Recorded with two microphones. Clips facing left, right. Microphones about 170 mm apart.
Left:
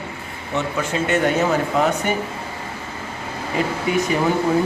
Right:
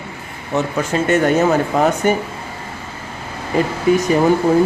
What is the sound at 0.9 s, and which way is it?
A man's voice, 45° right (ahead or behind).